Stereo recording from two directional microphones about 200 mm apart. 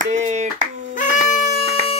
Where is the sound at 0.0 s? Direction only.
35° right (ahead or behind).